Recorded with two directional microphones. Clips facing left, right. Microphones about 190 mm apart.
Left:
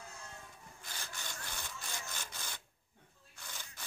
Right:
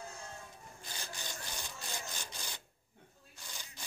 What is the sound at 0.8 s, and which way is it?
Wood, 20° right (ahead or behind).